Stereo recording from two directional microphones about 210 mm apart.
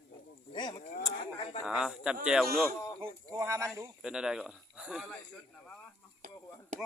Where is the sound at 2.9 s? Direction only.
20° right (ahead or behind).